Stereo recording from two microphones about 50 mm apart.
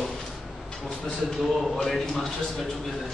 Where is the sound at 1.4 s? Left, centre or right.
Centre.